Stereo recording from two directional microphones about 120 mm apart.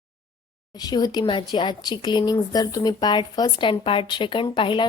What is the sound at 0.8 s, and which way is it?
Speech, 35° left (ahead or behind).